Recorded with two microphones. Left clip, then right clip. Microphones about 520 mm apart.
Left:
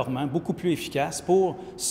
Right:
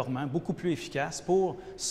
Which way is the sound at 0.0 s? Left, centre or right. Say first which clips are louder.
Left 5 dB; right.